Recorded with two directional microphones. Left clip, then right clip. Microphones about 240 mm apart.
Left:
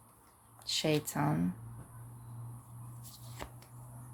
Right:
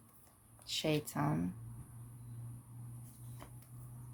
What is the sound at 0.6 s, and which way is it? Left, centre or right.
Speech, centre.